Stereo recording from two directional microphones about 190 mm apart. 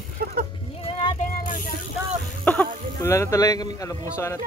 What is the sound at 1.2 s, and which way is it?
Vehicle, 40° left (ahead or behind).